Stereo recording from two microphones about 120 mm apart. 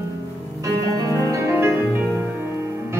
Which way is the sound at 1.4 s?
20° right (ahead or behind).